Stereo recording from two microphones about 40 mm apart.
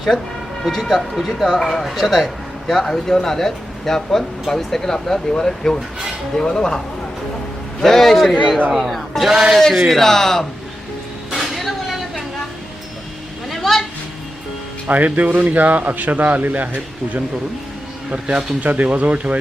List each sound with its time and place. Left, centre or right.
0.6 s a man's voice: centre
9.3 s a man's voice: centre
9.9 s speech: centre
11.3 s a sound: centre
13.5 s a sound: centre
14.8 s speech: right
18.1 s speech: right
18.6 s speech: right